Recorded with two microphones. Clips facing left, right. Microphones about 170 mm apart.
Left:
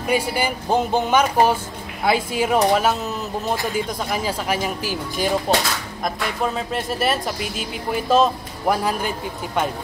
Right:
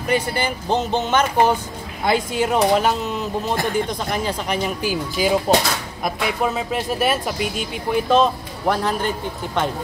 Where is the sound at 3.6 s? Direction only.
55° right (ahead or behind).